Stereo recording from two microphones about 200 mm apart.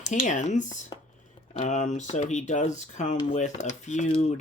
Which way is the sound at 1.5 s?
35° left (ahead or behind).